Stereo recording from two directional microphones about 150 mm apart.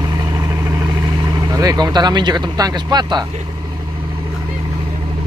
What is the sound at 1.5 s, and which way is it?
Speech, 25° right (ahead or behind).